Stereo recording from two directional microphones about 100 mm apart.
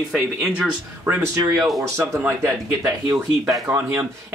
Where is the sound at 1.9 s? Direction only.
25° right (ahead or behind).